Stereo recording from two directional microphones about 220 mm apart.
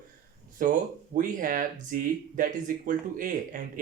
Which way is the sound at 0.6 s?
40° right (ahead or behind).